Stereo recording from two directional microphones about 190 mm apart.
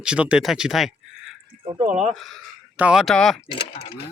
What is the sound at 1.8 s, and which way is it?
Speech, 35° right (ahead or behind).